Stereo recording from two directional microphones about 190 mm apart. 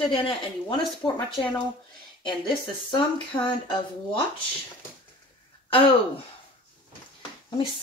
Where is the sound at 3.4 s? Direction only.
25° left (ahead or behind).